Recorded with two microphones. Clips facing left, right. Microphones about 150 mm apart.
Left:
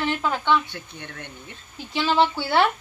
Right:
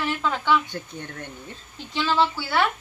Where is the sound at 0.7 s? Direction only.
40° right (ahead or behind).